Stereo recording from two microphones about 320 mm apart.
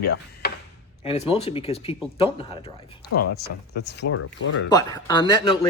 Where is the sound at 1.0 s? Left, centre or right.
Centre.